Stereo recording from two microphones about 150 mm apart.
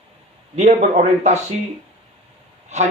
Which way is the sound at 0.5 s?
50° right (ahead or behind).